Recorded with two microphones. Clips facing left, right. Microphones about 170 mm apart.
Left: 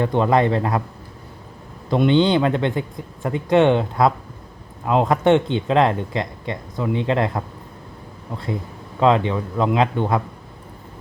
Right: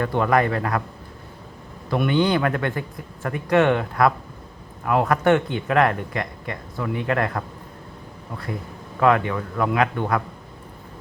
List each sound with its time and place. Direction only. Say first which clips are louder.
0.0 s speech: left 3 dB; 20° left (ahead or behind)
1.9 s speech: left 4 dB; 20° left (ahead or behind)
9.0 s speech: left 2 dB; 20° left (ahead or behind)